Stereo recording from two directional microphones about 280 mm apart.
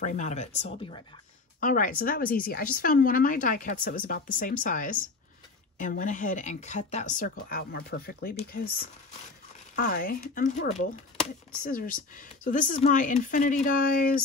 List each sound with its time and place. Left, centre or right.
0.0 s speech: left
9.8 s speech: left